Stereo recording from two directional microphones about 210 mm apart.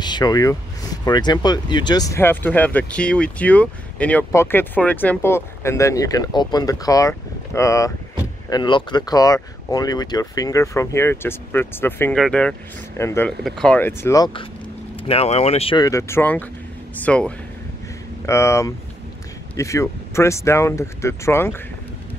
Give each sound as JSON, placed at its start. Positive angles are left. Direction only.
{"t": 0.0, "sound": "speech", "side_deg": 20}
{"t": 13.4, "sound": "speech", "side_deg": 0}
{"t": 15.0, "sound": "speech", "side_deg": 30}